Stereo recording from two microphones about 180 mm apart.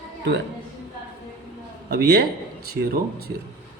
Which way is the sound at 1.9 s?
60° right (ahead or behind).